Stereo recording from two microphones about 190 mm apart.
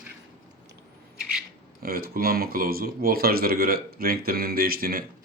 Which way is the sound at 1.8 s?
50° right (ahead or behind).